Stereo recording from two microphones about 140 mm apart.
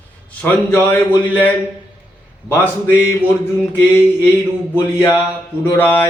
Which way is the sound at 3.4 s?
15° left (ahead or behind).